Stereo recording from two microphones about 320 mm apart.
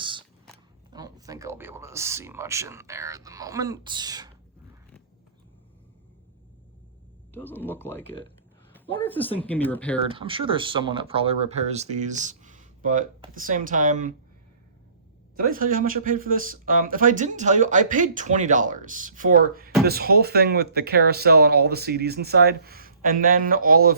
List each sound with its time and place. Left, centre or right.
0.0 s a sound: centre
0.9 s speech: centre
7.3 s speech: centre
10.0 s speech: centre
15.4 s speech: right